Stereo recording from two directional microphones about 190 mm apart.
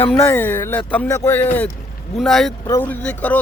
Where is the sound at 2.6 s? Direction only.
10° left (ahead or behind).